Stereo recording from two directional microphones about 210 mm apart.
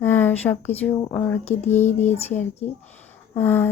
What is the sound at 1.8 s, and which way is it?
Speech, 30° left (ahead or behind).